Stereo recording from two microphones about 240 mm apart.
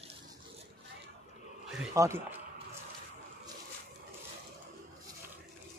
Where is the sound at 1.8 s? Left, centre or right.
Centre.